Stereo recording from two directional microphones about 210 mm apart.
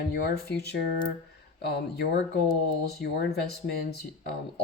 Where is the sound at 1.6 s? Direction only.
50° left (ahead or behind).